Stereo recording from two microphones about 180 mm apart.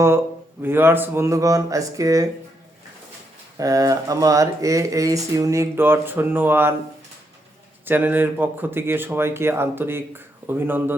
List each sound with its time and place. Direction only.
0.6 s speech: 10° right (ahead or behind)
3.6 s speech: 20° right (ahead or behind)
7.9 s speech: 10° right (ahead or behind)